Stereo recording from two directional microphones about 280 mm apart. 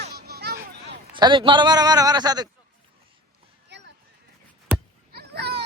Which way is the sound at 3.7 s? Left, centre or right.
Right.